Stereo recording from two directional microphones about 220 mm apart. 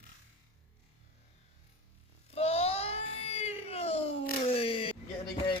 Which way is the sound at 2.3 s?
30° left (ahead or behind).